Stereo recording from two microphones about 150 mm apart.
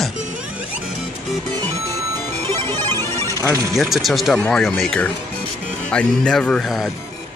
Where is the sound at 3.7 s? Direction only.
Centre (ahead or behind).